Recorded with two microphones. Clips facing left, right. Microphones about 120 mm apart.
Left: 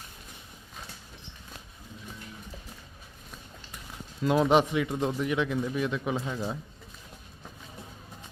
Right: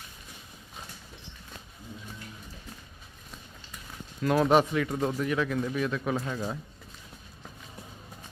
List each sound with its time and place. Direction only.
4.2 s speech: 20° left (ahead or behind)